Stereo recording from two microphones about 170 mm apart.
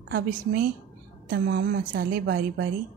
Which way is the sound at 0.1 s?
55° right (ahead or behind).